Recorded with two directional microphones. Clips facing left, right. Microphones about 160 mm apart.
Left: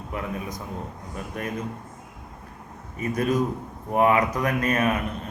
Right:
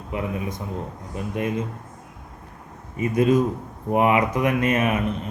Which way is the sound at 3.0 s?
25° right (ahead or behind).